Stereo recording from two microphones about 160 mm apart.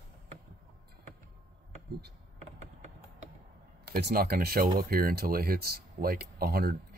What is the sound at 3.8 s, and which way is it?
Speech, 80° right.